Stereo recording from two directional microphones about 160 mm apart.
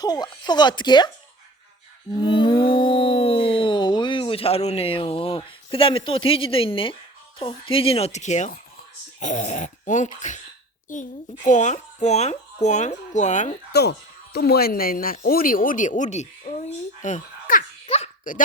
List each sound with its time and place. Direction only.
0.0 s speech: 25° left (ahead or behind)
2.1 s a woman's voice: 30° left (ahead or behind); by 13.6 s 50° left (ahead or behind)
14.3 s speech: 75° left (ahead or behind); by 17.7 s 50° left (ahead or behind)
17.8 s baby laughter: 40° left (ahead or behind)